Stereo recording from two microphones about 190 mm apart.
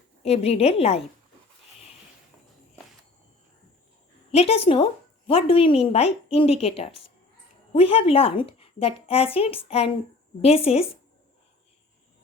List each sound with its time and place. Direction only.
0.2 s a woman's voice: 35° left (ahead or behind)
4.3 s a woman's voice: 30° left (ahead or behind)